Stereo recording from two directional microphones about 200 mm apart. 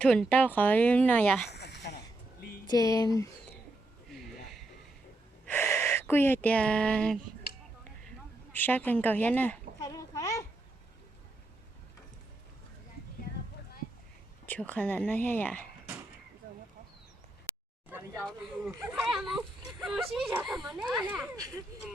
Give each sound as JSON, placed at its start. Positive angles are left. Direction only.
{"t": 0.0, "sound": "speech", "side_deg": 5}
{"t": 1.5, "sound": "a sound", "side_deg": 55}
{"t": 2.6, "sound": "speech", "side_deg": 15}
{"t": 4.1, "sound": "a sound", "side_deg": 0}
{"t": 5.5, "sound": "speech", "side_deg": 10}
{"t": 8.5, "sound": "a child's voice", "side_deg": 10}
{"t": 14.4, "sound": "speech", "side_deg": 10}
{"t": 17.8, "sound": "a sound", "side_deg": -10}
{"t": 18.2, "sound": "speech", "side_deg": 0}